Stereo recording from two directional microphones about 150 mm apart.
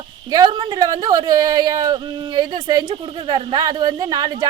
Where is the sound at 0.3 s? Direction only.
25° right (ahead or behind).